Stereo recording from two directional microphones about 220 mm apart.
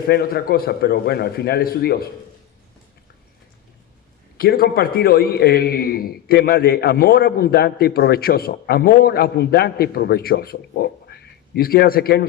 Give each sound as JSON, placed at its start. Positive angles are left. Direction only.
{"t": 0.1, "sound": "a man's voice", "side_deg": 45}
{"t": 4.4, "sound": "a man's voice", "side_deg": 40}